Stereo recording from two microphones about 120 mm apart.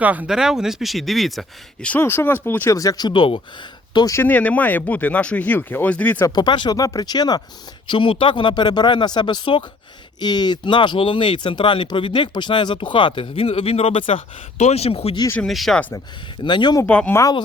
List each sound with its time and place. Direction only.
0.0 s speech: 15° right (ahead or behind); by 2.0 s 5° left (ahead or behind)
2.0 s speech: 20° left (ahead or behind)
2.7 s speech: 30° left (ahead or behind)
3.1 s speech: 45° left (ahead or behind)
3.9 s speech: 30° left (ahead or behind)
4.2 s speech: 15° left (ahead or behind)
6.2 s speech: 35° left (ahead or behind)
7.9 s speech: 45° left (ahead or behind)
15.4 s speech: centre (ahead or behind)
16.4 s speech: 40° left (ahead or behind)
16.8 s speech: 10° left (ahead or behind)
17.1 s speech: 25° left (ahead or behind)